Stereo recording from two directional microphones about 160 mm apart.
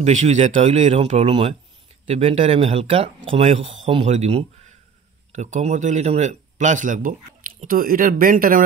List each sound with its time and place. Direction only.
0.0 s speech: 45° right (ahead or behind)